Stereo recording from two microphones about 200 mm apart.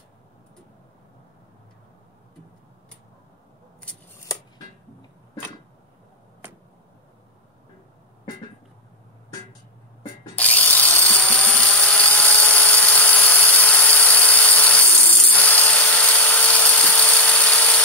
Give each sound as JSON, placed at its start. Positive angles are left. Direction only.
{"t": 4.3, "sound": "scissors", "side_deg": 20}
{"t": 10.3, "sound": "tools", "side_deg": 5}